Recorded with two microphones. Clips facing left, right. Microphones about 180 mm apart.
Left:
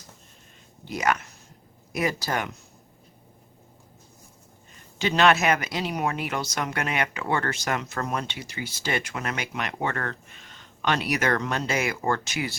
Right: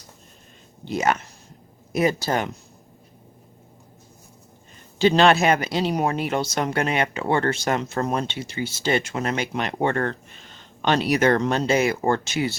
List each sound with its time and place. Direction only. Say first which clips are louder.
0.9 s speech: right 3 dB; 25° right (ahead or behind)
4.9 s speech: right 4 dB; 30° right (ahead or behind)